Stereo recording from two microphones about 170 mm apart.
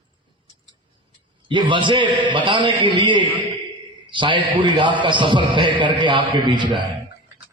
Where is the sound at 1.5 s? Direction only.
30° right (ahead or behind).